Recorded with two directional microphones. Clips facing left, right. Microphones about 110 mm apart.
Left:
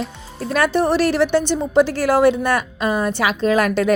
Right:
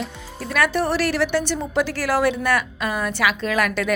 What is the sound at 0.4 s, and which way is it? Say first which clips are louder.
A woman's voice: left 4 dB; 30° left (ahead or behind).